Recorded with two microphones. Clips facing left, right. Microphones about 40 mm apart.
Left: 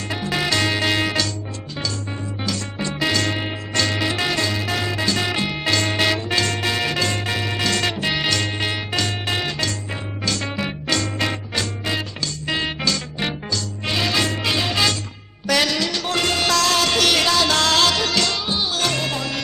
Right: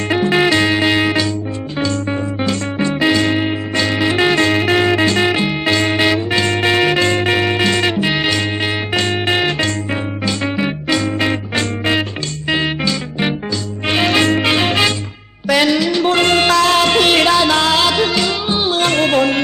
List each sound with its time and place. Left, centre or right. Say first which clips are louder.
0.1 s music: right 9 dB; right
2.4 s music: right 6 dB; right
3.1 s music: right 7 dB; centre; by 5.3 s right
5.3 s music: right 6 dB; centre
6.5 s music: right 8 dB; right; by 9.0 s centre
9.0 s music: right 9 dB; right
10.2 s music: right 5 dB; right
11.5 s music: right 8 dB; right
12.5 s music: right 6 dB; right
13.8 s music: right 8 dB; right
15.4 s music: right 6 dB; centre
16.0 s music: right 7 dB; right; by 18.5 s centre
18.5 s music: right 7 dB; right